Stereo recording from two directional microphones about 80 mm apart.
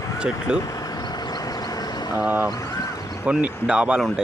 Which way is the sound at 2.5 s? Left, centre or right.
Left.